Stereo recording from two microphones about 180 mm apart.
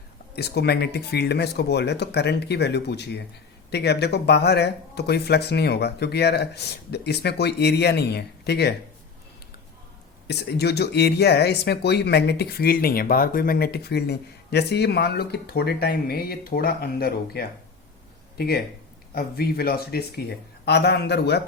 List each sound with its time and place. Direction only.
0.3 s speech: 65° left (ahead or behind)
10.2 s speech: 65° left (ahead or behind)